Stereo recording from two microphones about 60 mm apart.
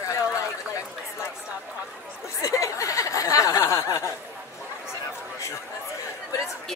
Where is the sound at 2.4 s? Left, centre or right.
Left.